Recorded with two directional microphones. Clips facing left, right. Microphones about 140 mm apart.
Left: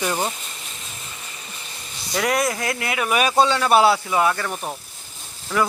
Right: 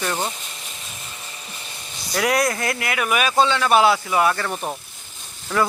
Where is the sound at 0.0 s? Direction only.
10° left (ahead or behind).